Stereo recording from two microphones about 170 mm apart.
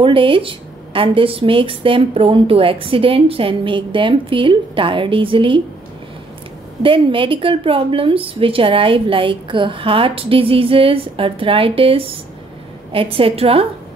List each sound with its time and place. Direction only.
0.0 s a woman's voice: 30° right (ahead or behind)
6.8 s a woman's voice: 30° right (ahead or behind)